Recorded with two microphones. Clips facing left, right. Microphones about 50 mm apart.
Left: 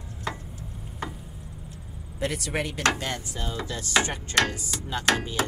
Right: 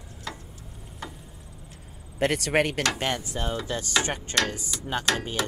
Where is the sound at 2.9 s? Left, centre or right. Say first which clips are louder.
Right 3 dB; right.